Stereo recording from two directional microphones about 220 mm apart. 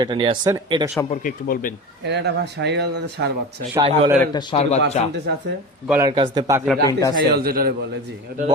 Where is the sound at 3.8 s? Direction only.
20° right (ahead or behind).